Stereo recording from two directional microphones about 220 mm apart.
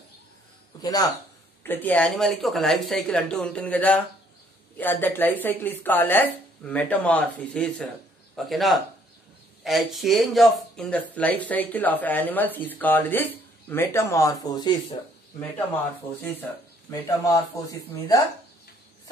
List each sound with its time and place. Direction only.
0.7 s speech: 15° left (ahead or behind)